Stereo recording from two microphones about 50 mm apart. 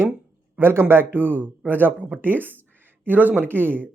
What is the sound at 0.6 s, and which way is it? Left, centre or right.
A man's voice, right.